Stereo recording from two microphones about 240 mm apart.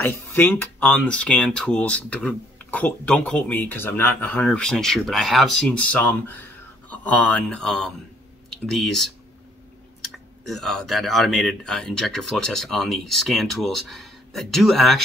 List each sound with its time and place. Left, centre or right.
0.0 s speech: centre